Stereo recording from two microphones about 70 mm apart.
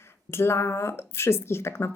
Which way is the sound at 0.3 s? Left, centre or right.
Left.